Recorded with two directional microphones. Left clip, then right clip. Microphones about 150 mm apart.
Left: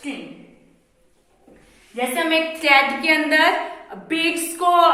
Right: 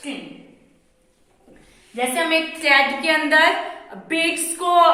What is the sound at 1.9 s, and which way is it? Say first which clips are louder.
Speech: right 1 dB; centre (ahead or behind).